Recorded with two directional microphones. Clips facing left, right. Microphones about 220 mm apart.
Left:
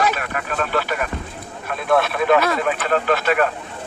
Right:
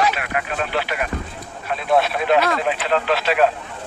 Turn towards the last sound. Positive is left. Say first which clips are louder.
# left 1 dB
turn(degrees=50)  # may be behind; listen again after turning